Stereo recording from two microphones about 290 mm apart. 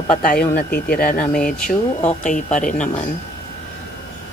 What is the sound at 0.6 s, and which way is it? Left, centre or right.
Speech, left.